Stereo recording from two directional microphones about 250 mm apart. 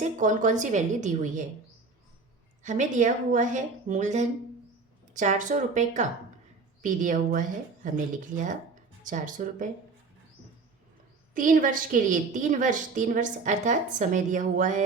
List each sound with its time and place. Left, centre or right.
0.0 s a woman's voice: right
2.6 s a woman's voice: right
11.3 s a woman's voice: right